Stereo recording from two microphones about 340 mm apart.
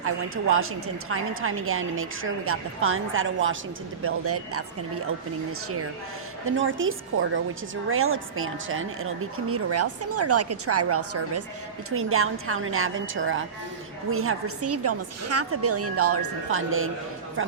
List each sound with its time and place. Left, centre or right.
0.5 s speech: right
6.4 s speech: right